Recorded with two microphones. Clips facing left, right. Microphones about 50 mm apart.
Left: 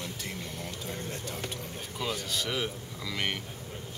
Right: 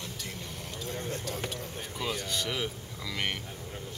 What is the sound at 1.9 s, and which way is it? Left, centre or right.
Speech, centre.